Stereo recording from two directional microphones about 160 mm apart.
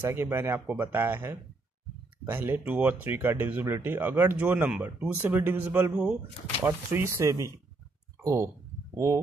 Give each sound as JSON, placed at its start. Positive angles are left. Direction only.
{"t": 0.0, "sound": "speech", "side_deg": -15}